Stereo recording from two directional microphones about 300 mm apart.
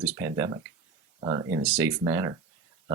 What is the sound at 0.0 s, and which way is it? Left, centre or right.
Speech, centre.